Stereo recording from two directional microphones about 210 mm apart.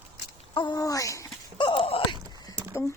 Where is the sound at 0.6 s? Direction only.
20° left (ahead or behind).